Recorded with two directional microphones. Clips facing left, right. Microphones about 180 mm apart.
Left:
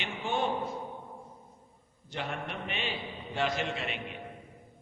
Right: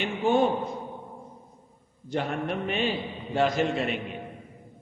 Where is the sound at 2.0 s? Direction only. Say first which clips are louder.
Right 8 dB; 45° right (ahead or behind).